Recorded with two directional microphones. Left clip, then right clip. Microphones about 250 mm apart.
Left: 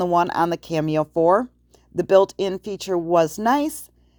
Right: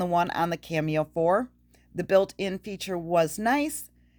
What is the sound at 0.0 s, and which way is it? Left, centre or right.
Speech, centre.